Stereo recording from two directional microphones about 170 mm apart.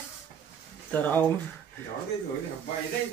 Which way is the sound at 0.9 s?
10° left (ahead or behind).